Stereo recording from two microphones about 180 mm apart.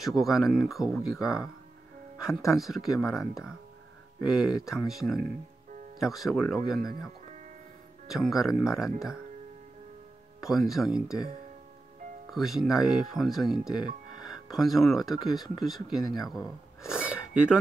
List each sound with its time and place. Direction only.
0.0 s speech: centre (ahead or behind)
0.9 s speech: 20° left (ahead or behind)
2.4 s speech: centre (ahead or behind)
8.1 s speech: centre (ahead or behind)
10.4 s speech: centre (ahead or behind)
12.3 s speech: centre (ahead or behind)
16.2 s a sound: centre (ahead or behind)